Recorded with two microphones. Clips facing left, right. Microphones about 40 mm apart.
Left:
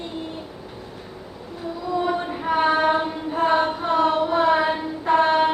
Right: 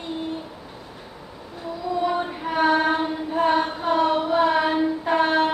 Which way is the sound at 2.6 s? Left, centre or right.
Centre.